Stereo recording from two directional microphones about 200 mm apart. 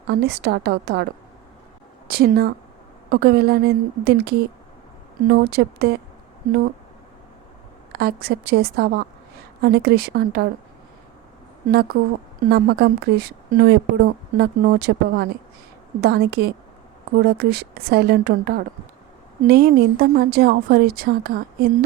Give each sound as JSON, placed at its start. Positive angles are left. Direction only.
{"t": 0.1, "sound": "a woman's voice", "side_deg": -55}
{"t": 2.0, "sound": "speech", "side_deg": -50}
{"t": 7.9, "sound": "speech", "side_deg": -50}
{"t": 11.7, "sound": "speech", "side_deg": -50}